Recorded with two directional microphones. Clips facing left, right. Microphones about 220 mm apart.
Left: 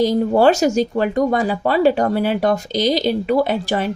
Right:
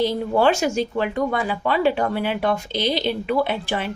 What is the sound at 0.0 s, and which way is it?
Speech, 40° left (ahead or behind).